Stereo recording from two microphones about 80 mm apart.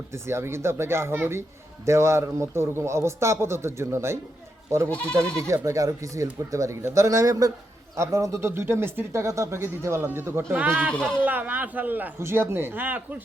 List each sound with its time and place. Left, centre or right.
0.1 s speech: right
4.9 s speech: centre
5.6 s speech: right
10.5 s speech: centre
10.9 s speech: centre
11.2 s speech: right